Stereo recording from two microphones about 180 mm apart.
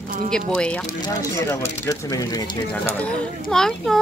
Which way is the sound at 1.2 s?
15° left (ahead or behind).